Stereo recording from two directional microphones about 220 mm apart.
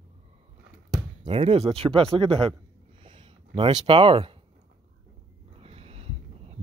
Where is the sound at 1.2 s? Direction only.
25° right (ahead or behind).